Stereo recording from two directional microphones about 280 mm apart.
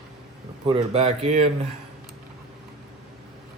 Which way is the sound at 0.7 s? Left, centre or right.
Right.